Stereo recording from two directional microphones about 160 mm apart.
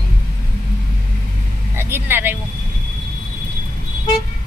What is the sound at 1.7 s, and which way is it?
Speech, 15° right (ahead or behind).